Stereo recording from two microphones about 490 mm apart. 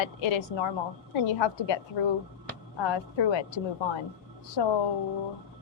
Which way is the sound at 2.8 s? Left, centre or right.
Left.